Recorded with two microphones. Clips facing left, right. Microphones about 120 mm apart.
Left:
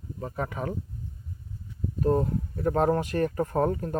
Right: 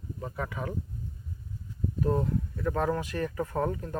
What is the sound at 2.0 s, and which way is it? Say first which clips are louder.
Speech: left 4 dB; 40° left (ahead or behind).